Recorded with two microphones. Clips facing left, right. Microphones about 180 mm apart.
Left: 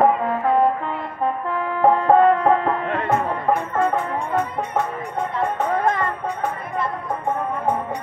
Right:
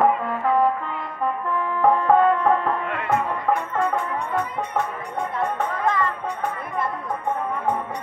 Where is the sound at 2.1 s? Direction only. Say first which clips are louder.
Left 4 dB; 35° left (ahead or behind).